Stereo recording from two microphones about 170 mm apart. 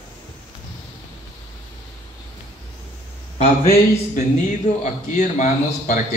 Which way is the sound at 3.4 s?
40° left (ahead or behind).